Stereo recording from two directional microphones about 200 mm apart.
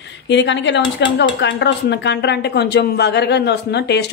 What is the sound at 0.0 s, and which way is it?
Speech, 60° left (ahead or behind).